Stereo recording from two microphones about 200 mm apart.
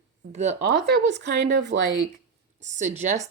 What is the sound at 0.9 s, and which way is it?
Speech, 60° right (ahead or behind).